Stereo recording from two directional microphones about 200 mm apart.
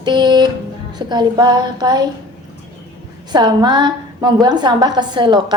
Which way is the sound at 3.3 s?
20° right (ahead or behind).